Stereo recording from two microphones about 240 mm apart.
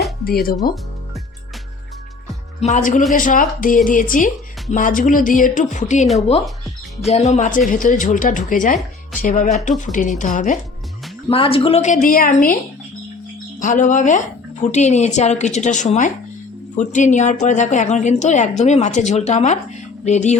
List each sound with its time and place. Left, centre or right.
0.3 s music: left
2.6 s speech: left
3.2 s music: left
7.1 s speech: left
7.7 s music: left
13.6 s speech: left
16.7 s music: left
17.4 s speech: left